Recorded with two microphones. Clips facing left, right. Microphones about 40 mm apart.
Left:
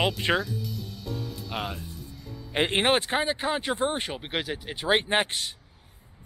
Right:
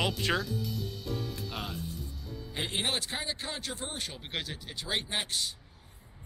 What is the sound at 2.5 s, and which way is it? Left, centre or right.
Speech, left.